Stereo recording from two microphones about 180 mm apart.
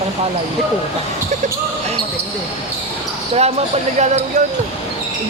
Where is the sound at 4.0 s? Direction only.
40° right (ahead or behind).